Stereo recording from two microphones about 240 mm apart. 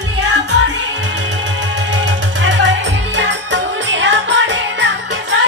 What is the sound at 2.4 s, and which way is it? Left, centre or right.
Music, right.